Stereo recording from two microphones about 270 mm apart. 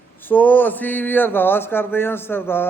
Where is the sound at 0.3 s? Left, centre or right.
Centre.